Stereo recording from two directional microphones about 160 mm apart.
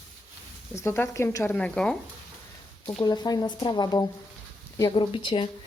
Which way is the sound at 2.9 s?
30° left (ahead or behind).